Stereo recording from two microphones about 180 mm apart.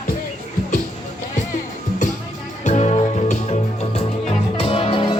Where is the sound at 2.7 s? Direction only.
40° left (ahead or behind).